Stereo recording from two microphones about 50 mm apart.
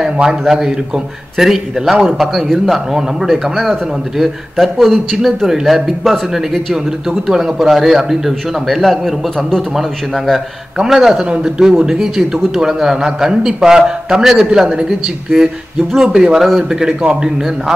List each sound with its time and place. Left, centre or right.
0.0 s a man's voice: centre
10.8 s a man's voice: centre